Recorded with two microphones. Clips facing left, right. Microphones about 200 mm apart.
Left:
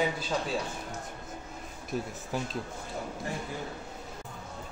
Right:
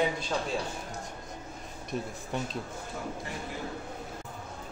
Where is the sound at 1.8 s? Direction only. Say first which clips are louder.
Left 1 dB; centre (ahead or behind).